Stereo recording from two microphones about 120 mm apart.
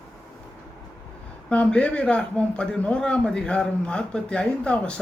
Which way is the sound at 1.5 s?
10° left (ahead or behind).